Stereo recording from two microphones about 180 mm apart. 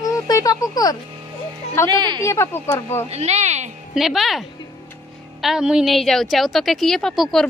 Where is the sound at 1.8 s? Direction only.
25° right (ahead or behind).